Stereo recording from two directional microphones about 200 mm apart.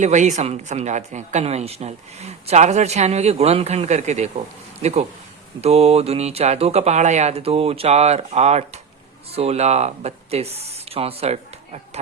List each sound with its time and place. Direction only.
0.0 s speech: 35° right (ahead or behind)